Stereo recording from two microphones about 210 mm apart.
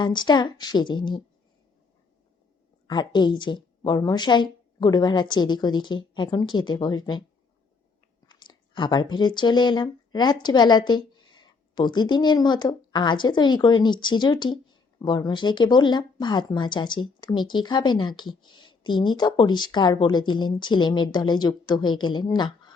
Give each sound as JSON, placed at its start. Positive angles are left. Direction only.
{"t": 0.0, "sound": "speech", "side_deg": 20}
{"t": 2.8, "sound": "speech", "side_deg": 20}
{"t": 8.3, "sound": "speech", "side_deg": 20}